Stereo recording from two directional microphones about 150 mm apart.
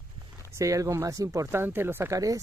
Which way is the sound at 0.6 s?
20° right (ahead or behind).